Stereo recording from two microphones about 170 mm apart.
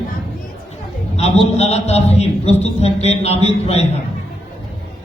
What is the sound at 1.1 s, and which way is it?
A woman's voice, 40° left (ahead or behind).